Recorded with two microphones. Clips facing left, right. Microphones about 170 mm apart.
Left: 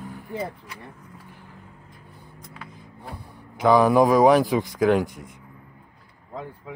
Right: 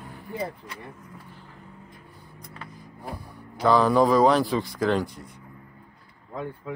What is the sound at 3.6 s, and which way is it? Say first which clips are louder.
A man's voice: left 3 dB; 15° left (ahead or behind).